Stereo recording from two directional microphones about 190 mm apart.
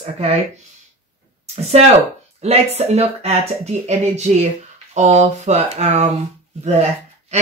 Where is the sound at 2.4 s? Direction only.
35° right (ahead or behind).